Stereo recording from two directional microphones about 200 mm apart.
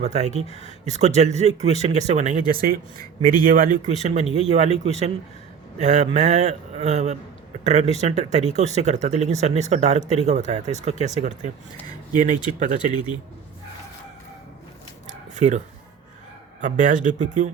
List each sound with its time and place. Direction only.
0.0 s speech: 35° right (ahead or behind)
15.4 s speech: 35° right (ahead or behind)